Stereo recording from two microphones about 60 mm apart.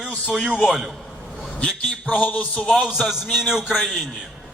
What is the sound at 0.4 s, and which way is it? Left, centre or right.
Speech, centre.